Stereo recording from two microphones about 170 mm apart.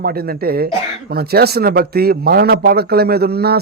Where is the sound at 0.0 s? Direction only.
60° right (ahead or behind).